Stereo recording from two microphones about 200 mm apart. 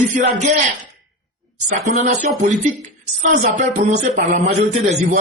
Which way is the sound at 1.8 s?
35° right (ahead or behind).